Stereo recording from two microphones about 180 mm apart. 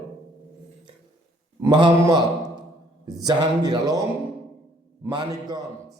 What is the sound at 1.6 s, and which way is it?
Speech, 20° right (ahead or behind).